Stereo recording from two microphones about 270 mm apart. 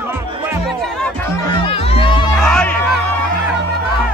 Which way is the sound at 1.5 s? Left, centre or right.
Centre.